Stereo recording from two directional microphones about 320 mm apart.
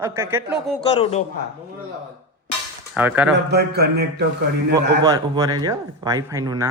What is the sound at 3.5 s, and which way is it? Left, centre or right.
Speech, right.